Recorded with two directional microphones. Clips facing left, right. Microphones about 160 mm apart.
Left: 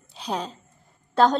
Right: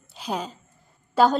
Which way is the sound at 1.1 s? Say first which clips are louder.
Even; 5° right (ahead or behind).